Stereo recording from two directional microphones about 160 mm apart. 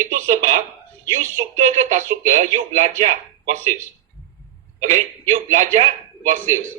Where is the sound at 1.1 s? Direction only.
50° right (ahead or behind).